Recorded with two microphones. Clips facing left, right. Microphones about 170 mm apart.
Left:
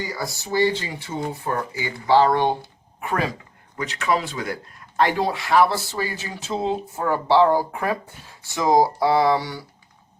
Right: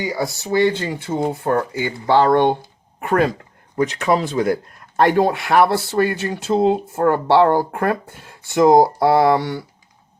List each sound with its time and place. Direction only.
0.3 s speech: 60° right (ahead or behind)
3.8 s speech: 40° right (ahead or behind); by 9.6 s 55° right (ahead or behind)